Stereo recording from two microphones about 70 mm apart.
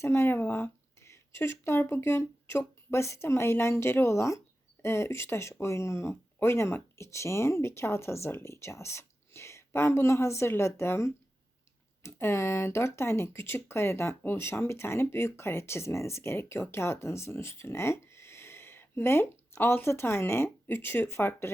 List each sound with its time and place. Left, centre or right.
0.0 s speech: left